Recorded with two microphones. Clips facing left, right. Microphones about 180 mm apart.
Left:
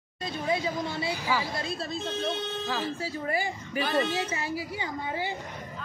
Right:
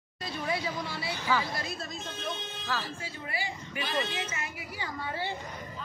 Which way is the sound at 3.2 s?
45° left (ahead or behind).